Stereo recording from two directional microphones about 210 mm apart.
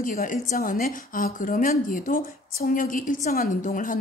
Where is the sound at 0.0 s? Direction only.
40° left (ahead or behind).